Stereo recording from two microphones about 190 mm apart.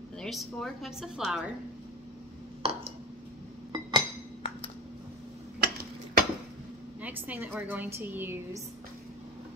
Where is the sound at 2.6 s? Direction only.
30° right (ahead or behind).